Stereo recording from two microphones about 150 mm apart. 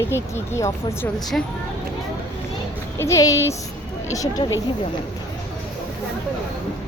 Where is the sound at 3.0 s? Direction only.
20° left (ahead or behind).